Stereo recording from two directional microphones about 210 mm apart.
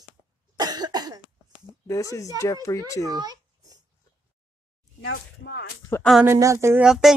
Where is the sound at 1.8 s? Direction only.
15° left (ahead or behind).